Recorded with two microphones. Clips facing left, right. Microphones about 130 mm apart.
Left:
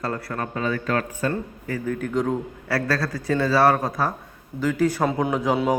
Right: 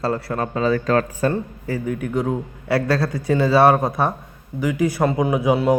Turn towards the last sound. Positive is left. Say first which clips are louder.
# right 4 dB
turn(degrees=-10)  # may be behind; listen again after turning